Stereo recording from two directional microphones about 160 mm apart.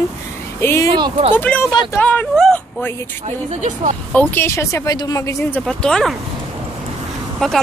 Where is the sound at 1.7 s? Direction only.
25° left (ahead or behind).